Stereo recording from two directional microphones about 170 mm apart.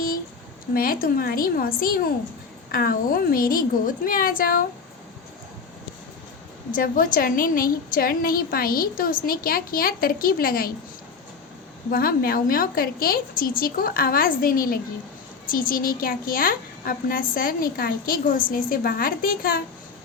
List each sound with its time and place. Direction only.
0.7 s a woman's voice: 60° left (ahead or behind)
6.7 s a woman's voice: 55° left (ahead or behind)
11.9 s a woman's voice: 60° left (ahead or behind)